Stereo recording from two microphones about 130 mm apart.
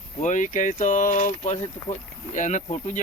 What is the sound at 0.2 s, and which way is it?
Speech, 75° left (ahead or behind).